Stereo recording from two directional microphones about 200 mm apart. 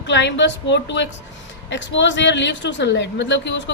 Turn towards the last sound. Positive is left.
turn(degrees=65)  # may be behind; listen again after turning